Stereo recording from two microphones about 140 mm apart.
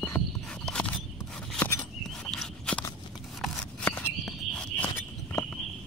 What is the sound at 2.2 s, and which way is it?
Walk, 10° left (ahead or behind).